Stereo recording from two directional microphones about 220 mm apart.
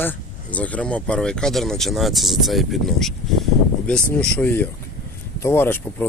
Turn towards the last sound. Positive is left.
turn(degrees=10)  # may be behind; listen again after turning